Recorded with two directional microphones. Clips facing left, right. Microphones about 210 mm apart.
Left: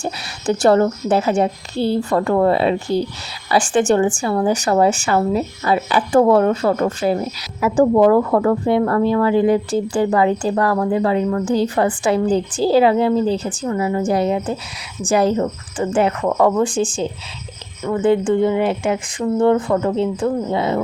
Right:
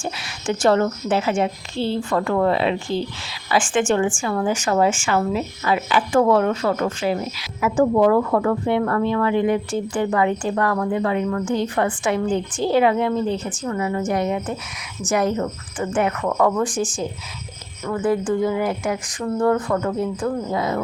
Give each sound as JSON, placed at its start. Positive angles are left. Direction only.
{"t": 0.0, "sound": "speech", "side_deg": 40}